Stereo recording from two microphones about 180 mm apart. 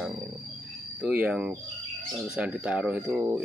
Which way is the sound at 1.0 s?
5° right (ahead or behind).